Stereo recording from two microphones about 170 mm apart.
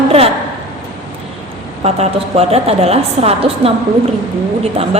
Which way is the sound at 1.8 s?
40° right (ahead or behind).